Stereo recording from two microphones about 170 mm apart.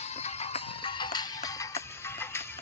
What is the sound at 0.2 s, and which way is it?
Music, 40° left (ahead or behind).